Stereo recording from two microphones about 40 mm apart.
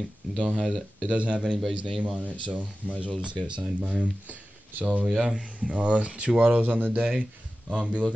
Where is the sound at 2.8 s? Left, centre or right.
Left.